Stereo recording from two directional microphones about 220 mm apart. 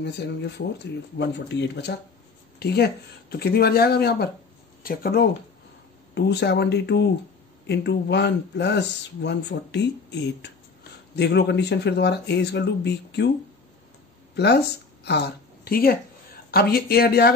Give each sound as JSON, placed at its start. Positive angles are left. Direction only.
{"t": 0.0, "sound": "speech", "side_deg": 50}
{"t": 14.3, "sound": "speech", "side_deg": 50}